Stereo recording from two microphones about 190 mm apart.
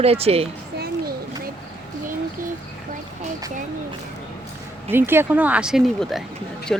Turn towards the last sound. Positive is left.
turn(degrees=0)  # may be behind; listen again after turning